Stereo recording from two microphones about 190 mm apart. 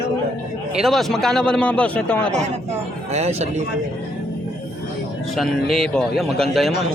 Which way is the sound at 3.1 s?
35° right (ahead or behind).